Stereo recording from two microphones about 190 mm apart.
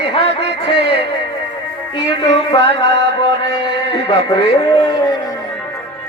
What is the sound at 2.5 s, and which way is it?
Speech, 25° left (ahead or behind).